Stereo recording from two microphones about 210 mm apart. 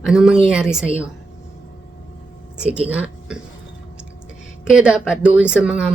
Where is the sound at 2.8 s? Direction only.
5° right (ahead or behind).